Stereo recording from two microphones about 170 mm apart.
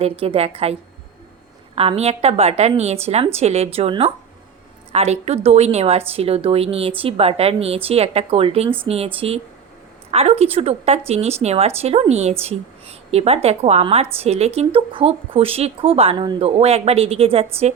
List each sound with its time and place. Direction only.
0.0 s a woman's voice: 35° right (ahead or behind)